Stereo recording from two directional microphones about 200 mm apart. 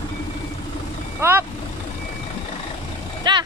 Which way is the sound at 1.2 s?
10° right (ahead or behind).